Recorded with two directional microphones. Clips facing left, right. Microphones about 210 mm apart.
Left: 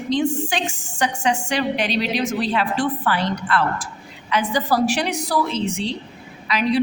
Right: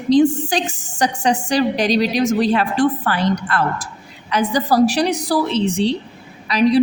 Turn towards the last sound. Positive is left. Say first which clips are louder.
# right 5 dB
turn(degrees=-35)  # may be behind; listen again after turning